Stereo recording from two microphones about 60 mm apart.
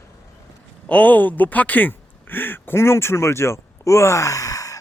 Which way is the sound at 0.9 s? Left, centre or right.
Left.